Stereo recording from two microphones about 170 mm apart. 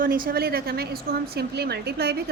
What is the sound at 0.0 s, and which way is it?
A woman's voice, 55° right (ahead or behind).